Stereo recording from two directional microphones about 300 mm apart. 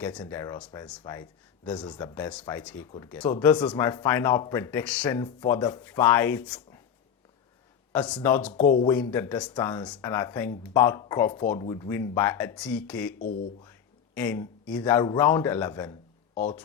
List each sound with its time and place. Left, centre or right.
0.0 s speech: centre
7.9 s speech: centre
8.6 s speech: left
8.9 s speech: centre
13.1 s speech: left
13.6 s speech: centre